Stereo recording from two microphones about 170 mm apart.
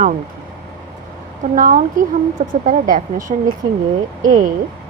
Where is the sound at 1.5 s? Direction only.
55° right (ahead or behind).